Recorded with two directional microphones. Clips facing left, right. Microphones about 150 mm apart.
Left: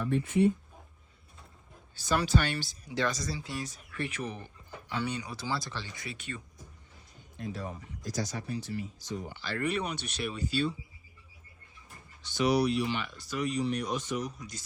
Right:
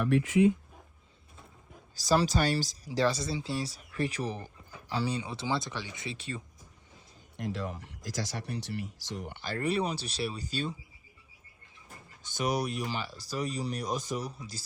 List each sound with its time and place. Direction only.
0.0 s speech: 90° right
2.0 s speech: 35° right (ahead or behind)
7.3 s speech: 85° right
8.4 s speech: 70° right (ahead or behind)
9.4 s speech: 40° right (ahead or behind)
12.2 s speech: 45° right (ahead or behind)